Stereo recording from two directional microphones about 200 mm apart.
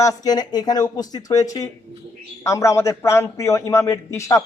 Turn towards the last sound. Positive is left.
turn(degrees=15)  # may be behind; listen again after turning